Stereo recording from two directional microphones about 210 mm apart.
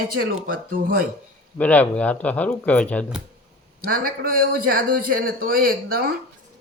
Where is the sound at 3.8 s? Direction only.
45° right (ahead or behind).